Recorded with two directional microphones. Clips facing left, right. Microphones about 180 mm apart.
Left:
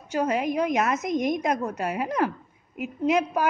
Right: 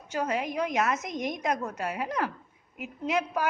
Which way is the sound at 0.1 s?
15° left (ahead or behind).